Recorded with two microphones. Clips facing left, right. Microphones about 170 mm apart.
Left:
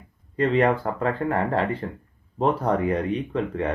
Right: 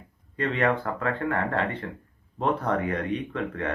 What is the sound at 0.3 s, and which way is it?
Speech, 35° left (ahead or behind).